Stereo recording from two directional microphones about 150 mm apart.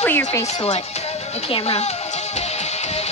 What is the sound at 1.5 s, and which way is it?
Music, 40° left (ahead or behind).